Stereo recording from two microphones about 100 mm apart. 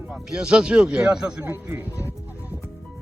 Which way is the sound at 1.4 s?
25° right (ahead or behind).